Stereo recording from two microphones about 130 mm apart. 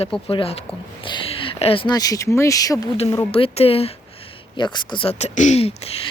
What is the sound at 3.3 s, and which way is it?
Speech, 50° left (ahead or behind).